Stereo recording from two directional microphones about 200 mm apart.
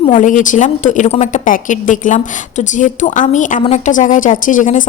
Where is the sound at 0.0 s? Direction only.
40° left (ahead or behind).